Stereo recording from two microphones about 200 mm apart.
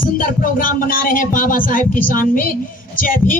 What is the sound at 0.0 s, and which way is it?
Speech, 45° left (ahead or behind).